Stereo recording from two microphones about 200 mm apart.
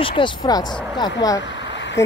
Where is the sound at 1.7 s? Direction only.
65° left (ahead or behind).